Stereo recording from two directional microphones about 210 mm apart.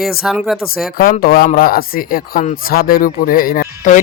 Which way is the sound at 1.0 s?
45° left (ahead or behind).